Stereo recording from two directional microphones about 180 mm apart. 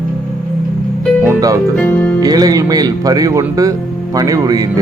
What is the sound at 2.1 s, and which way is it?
Speech, 20° right (ahead or behind).